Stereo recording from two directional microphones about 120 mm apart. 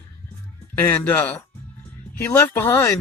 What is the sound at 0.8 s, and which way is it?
Speech, 20° left (ahead or behind).